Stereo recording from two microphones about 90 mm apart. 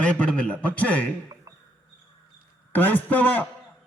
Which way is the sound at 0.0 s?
15° left (ahead or behind).